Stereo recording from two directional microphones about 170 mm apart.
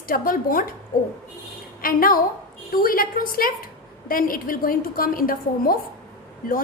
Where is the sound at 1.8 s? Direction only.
55° left (ahead or behind).